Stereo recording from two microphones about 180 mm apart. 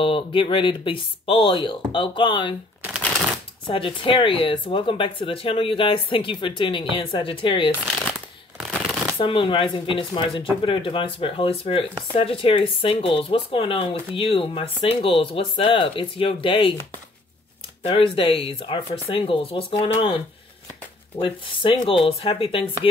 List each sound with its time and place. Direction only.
0.0 s speech: 30° left (ahead or behind)
3.6 s speech: 30° left (ahead or behind)
9.2 s speech: 30° left (ahead or behind)
17.8 s speech: 30° left (ahead or behind)
21.2 s speech: 30° left (ahead or behind)